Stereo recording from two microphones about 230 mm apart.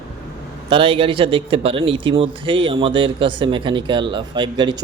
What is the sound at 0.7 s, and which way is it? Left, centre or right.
A man's voice, right.